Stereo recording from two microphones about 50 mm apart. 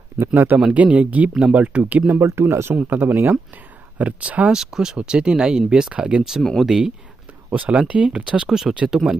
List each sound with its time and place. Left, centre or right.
0.2 s speech: right
0.7 s speech: right
2.1 s speech: right
2.7 s speech: right
4.5 s speech: centre
7.5 s speech: right
8.5 s speech: centre